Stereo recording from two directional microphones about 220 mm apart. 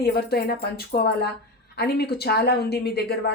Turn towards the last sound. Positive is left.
turn(degrees=45)  # may be behind; listen again after turning